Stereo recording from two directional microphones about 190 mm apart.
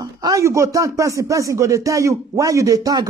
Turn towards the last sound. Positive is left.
turn(degrees=-20)  # may be behind; listen again after turning